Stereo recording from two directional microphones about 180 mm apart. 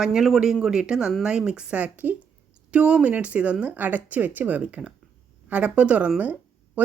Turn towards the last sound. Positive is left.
turn(degrees=-10)  # may be behind; listen again after turning